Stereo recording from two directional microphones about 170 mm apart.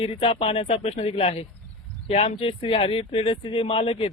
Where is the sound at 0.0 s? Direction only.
35° left (ahead or behind).